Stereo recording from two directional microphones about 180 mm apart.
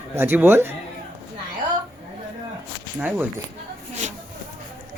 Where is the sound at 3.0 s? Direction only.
10° right (ahead or behind).